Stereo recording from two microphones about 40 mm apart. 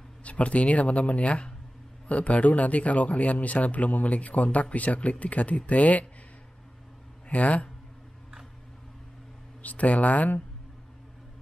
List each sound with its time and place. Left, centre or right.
0.2 s speech: left
7.2 s speech: left
9.6 s speech: left